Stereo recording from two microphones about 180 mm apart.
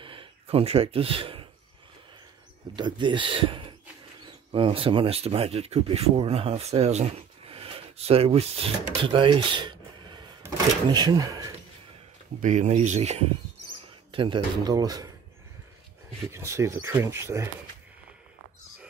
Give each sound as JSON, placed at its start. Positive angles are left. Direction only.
{"t": 0.0, "sound": "a sound", "side_deg": -30}
{"t": 2.7, "sound": "speech", "side_deg": -25}
{"t": 12.4, "sound": "speech", "side_deg": -45}
{"t": 14.1, "sound": "speech", "side_deg": -25}
{"t": 16.3, "sound": "speech", "side_deg": -15}